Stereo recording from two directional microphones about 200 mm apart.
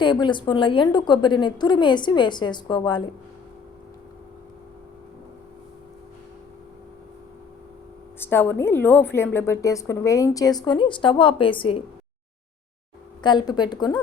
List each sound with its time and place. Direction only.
0.0 s a woman's voice: 25° left (ahead or behind)
8.2 s a woman's voice: 10° left (ahead or behind)
13.2 s a woman's voice: 20° left (ahead or behind)